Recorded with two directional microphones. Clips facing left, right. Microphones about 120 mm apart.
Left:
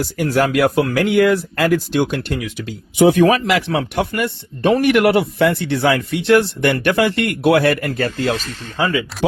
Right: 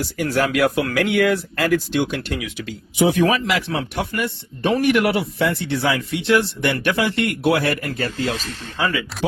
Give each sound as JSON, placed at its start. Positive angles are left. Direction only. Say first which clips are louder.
{"t": 0.2, "sound": "a man's voice", "louder": "left 3 dB", "side_deg": 45}
{"t": 8.8, "sound": "speech", "louder": "left 4 dB", "side_deg": 30}